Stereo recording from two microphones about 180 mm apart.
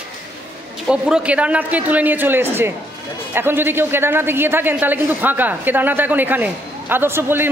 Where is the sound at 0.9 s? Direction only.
5° right (ahead or behind).